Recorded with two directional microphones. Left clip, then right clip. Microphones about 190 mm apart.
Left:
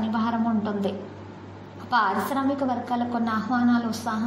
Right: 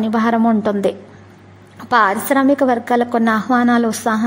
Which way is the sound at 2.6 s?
50° right (ahead or behind).